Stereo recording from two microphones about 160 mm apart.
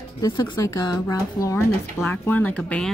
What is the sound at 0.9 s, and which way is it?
Speech, 20° left (ahead or behind).